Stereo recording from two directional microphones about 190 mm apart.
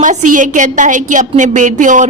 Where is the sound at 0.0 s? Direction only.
40° right (ahead or behind).